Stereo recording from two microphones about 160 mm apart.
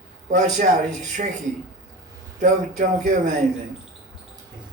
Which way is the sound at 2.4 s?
55° right (ahead or behind).